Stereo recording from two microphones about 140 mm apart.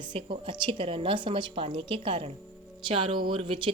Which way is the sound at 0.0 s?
40° right (ahead or behind).